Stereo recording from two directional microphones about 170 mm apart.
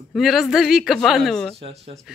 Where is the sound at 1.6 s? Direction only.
35° right (ahead or behind).